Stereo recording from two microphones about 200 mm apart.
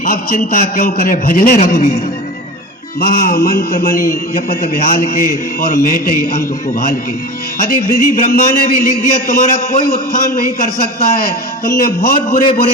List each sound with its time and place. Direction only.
0.0 s a man's voice: 45° left (ahead or behind)
3.0 s a man's voice: 45° left (ahead or behind)